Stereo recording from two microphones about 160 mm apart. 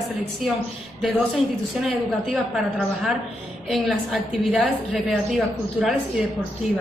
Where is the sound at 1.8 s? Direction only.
Centre (ahead or behind).